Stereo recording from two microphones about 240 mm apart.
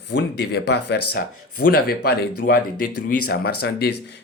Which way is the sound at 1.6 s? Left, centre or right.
Left.